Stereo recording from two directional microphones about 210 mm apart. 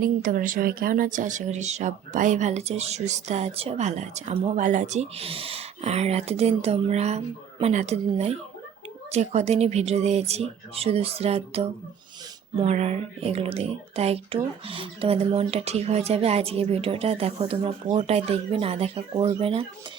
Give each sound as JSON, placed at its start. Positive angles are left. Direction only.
{"t": 0.0, "sound": "speech", "side_deg": -40}